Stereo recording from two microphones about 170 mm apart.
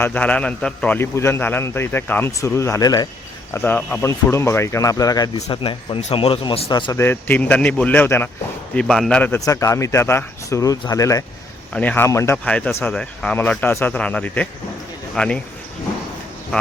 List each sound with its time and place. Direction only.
0.0 s a man's voice: 10° left (ahead or behind)
3.5 s a man's voice: 10° left (ahead or behind)
5.4 s a man's voice: 35° left (ahead or behind)
7.0 s a man's voice: 10° left (ahead or behind)
9.4 s speech: 20° left (ahead or behind)
11.7 s a man's voice: 10° left (ahead or behind)